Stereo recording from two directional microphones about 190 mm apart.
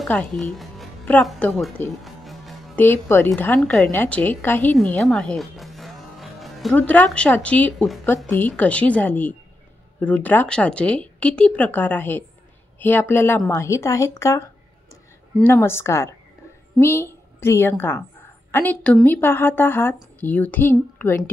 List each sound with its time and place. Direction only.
0.0 s a woman's voice: 5° left (ahead or behind)